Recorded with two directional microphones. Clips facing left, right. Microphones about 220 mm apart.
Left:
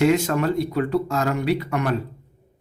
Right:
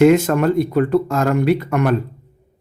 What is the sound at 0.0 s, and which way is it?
Speech, 50° right (ahead or behind).